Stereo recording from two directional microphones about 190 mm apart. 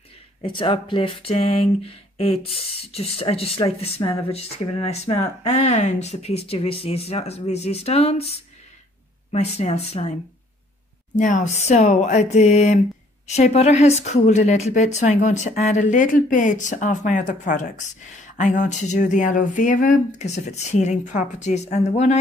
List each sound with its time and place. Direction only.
0.4 s speech: 25° left (ahead or behind)
9.3 s speech: 35° left (ahead or behind)
11.1 s speech: 40° left (ahead or behind)